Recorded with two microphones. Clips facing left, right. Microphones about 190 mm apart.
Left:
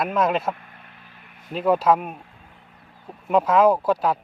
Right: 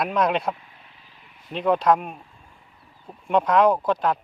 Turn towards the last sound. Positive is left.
turn(degrees=10)  # may be behind; listen again after turning